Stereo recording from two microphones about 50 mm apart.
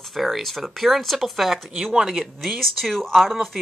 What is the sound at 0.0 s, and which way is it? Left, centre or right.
Speech, centre.